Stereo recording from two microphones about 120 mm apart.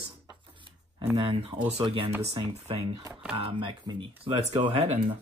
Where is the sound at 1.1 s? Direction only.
45° right (ahead or behind).